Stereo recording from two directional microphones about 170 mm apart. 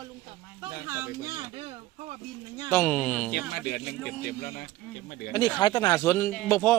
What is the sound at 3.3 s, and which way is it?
Speech, 65° left (ahead or behind).